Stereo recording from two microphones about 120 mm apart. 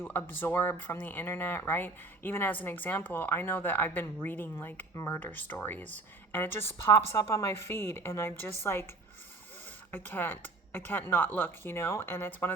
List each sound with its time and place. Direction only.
0.0 s speech: 15° left (ahead or behind)
9.9 s a woman's voice: 15° left (ahead or behind)